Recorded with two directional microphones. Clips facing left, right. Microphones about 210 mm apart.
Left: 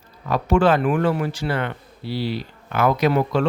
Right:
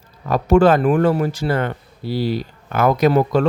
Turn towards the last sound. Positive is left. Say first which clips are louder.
# right 4 dB
turn(degrees=-40)  # may be behind; listen again after turning